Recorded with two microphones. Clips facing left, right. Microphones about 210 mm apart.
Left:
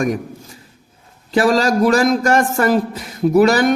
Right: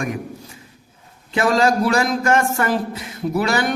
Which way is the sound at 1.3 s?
40° left (ahead or behind).